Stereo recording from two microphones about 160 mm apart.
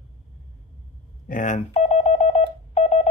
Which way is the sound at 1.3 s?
55° left (ahead or behind).